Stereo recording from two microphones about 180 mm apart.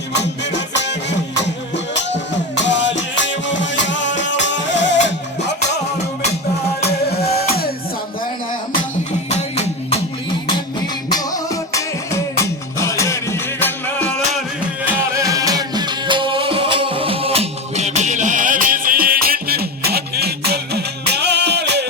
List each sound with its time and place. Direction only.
0.1 s music: 75° left (ahead or behind)
2.6 s music: 85° left
7.3 s a sound: 55° left (ahead or behind)
11.7 s music: 15° left (ahead or behind)
14.8 s music: 15° right (ahead or behind); by 21.8 s 70° right (ahead or behind)